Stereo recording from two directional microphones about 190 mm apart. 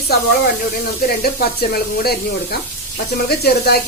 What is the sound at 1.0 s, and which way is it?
Speech, 55° left (ahead or behind).